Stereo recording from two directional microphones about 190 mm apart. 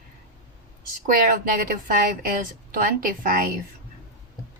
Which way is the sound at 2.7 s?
45° right (ahead or behind).